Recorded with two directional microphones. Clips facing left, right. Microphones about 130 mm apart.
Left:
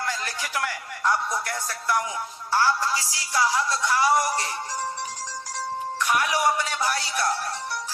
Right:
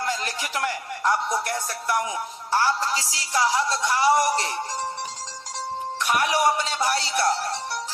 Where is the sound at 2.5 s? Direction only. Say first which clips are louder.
Even; 20° right (ahead or behind).